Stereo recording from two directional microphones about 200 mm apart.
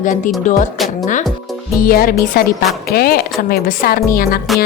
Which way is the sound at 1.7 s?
45° left (ahead or behind).